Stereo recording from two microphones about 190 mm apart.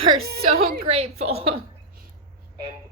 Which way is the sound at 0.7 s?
35° right (ahead or behind).